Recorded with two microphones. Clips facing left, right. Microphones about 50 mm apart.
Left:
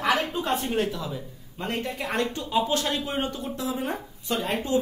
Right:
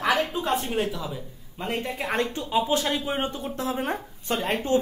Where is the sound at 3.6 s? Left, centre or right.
Right.